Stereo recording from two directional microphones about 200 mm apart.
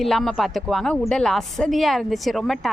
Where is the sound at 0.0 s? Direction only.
Centre (ahead or behind).